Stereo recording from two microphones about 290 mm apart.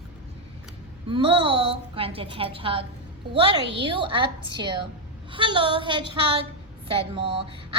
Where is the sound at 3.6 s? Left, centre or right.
Right.